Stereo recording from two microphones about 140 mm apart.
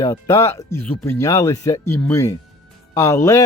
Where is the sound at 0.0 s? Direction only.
25° left (ahead or behind).